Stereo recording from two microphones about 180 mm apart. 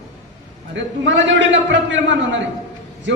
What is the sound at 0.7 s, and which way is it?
A man's voice, 85° right.